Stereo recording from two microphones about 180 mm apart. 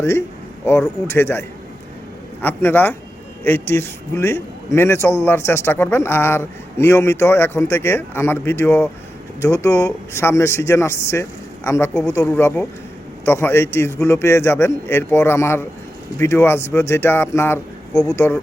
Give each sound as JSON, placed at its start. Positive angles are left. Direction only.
{"t": 0.6, "sound": "a man's voice", "side_deg": 15}